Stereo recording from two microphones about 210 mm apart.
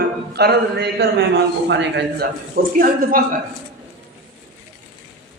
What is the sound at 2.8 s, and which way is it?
Speech, 45° right (ahead or behind).